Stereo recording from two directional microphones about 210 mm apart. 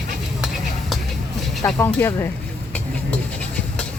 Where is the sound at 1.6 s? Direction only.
10° left (ahead or behind).